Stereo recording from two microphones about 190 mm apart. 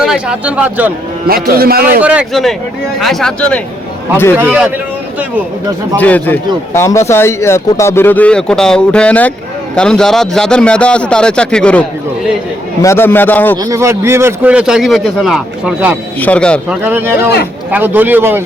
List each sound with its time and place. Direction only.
0.0 s a man's voice: 5° right (ahead or behind)
1.5 s speech: 50° right (ahead or behind)
2.0 s a man's voice: 5° right (ahead or behind)
6.0 s a man's voice: 10° left (ahead or behind)
13.6 s a man's voice: 15° right (ahead or behind)
16.2 s speech: 5° left (ahead or behind)
16.6 s a man's voice: 10° right (ahead or behind)